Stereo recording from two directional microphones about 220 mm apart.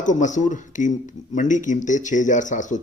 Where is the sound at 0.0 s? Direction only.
35° left (ahead or behind).